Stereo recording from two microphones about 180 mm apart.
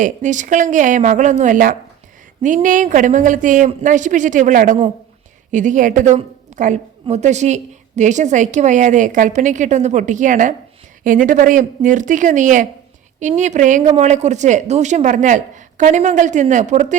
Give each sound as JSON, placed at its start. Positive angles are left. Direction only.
{"t": 0.0, "sound": "a woman's voice", "side_deg": -45}